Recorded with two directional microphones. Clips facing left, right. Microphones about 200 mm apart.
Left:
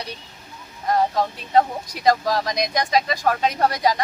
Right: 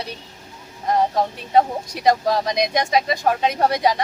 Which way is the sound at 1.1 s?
25° right (ahead or behind).